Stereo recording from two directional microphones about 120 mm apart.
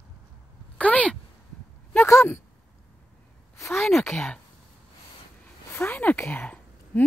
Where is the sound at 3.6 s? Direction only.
20° left (ahead or behind).